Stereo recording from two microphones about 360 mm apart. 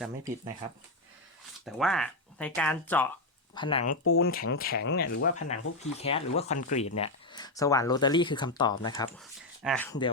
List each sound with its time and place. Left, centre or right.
1.6 s speech: centre
3.8 s speech: left; by 10.1 s centre